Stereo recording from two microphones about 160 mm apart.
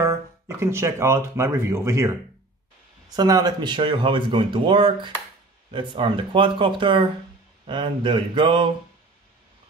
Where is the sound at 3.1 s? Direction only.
25° right (ahead or behind).